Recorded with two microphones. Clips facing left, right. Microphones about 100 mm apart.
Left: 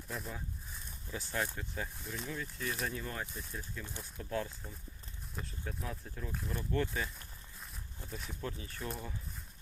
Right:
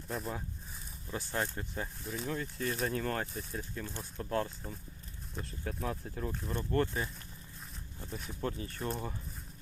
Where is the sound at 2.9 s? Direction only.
55° right (ahead or behind).